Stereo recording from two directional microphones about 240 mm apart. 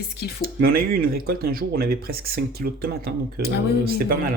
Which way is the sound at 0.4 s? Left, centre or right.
Right.